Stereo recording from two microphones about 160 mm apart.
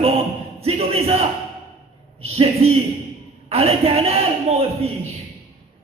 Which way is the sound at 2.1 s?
40° right (ahead or behind).